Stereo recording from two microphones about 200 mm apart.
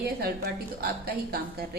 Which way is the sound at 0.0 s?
50° right (ahead or behind).